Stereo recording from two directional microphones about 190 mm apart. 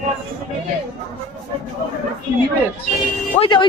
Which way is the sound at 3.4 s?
25° left (ahead or behind).